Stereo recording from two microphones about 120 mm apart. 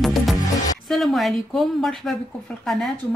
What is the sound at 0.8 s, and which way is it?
Speech, centre (ahead or behind).